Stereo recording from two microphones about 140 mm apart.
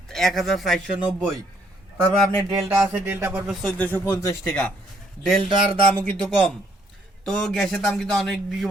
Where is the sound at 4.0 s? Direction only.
20° left (ahead or behind).